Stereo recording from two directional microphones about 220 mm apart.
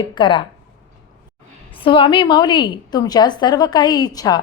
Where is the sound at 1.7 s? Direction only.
25° left (ahead or behind).